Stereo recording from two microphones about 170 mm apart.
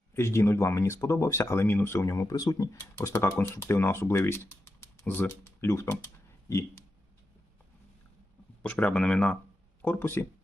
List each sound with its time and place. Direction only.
0.1 s speech: 15° left (ahead or behind)
8.6 s speech: 10° left (ahead or behind)